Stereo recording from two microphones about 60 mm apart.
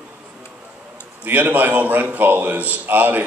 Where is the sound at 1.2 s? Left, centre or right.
Right.